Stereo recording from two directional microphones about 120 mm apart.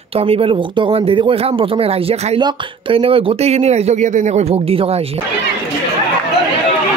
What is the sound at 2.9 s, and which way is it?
Speech, 50° right (ahead or behind).